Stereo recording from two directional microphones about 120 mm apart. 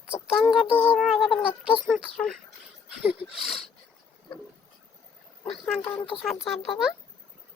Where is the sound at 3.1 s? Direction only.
50° left (ahead or behind).